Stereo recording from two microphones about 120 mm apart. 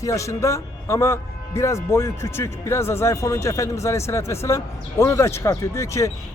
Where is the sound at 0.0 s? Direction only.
25° left (ahead or behind).